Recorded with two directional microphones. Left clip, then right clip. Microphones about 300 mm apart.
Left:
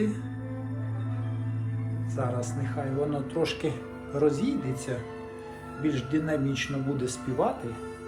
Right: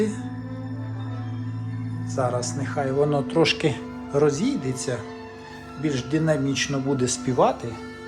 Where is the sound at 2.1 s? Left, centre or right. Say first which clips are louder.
Right 7 dB; centre.